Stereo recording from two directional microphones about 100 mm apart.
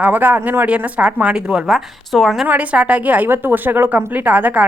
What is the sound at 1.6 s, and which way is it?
Speech, centre (ahead or behind).